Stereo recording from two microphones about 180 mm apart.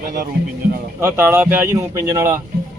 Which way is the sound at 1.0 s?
15° right (ahead or behind).